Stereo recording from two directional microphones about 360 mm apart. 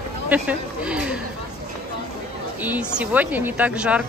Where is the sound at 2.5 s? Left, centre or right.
Centre.